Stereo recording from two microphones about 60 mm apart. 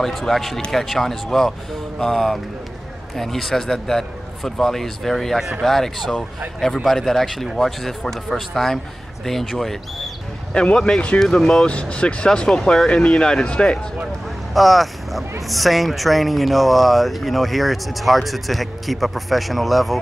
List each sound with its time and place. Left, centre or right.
0.0 s speech: centre
10.5 s speech: centre
14.5 s speech: centre